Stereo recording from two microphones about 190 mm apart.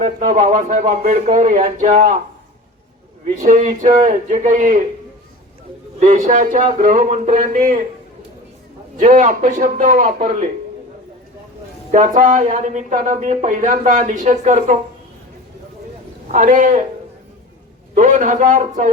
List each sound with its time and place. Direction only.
0.0 s speech: 40° right (ahead or behind)
3.4 s speech: 40° right (ahead or behind)
6.0 s a man's voice: 40° right (ahead or behind)
9.0 s a man's voice: 40° right (ahead or behind)
11.9 s speech: 40° right (ahead or behind)
16.3 s speech: 40° right (ahead or behind)
17.9 s a man's voice: 45° right (ahead or behind)